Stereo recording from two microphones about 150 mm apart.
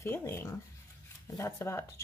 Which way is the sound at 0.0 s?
15° left (ahead or behind).